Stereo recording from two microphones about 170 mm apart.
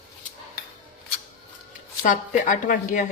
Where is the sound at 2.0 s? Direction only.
50° left (ahead or behind).